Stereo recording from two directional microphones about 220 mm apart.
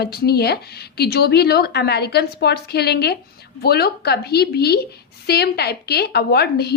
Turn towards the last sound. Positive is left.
turn(degrees=45)  # may be behind; listen again after turning